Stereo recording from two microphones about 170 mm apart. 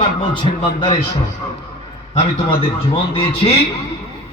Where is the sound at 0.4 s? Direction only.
30° left (ahead or behind).